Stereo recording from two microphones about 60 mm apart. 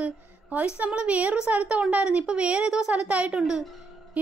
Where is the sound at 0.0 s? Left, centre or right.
Right.